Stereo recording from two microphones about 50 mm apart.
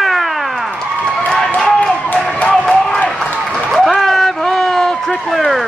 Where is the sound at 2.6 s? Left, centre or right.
Centre.